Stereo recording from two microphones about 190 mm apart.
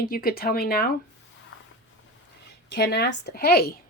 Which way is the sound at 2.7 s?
60° left (ahead or behind).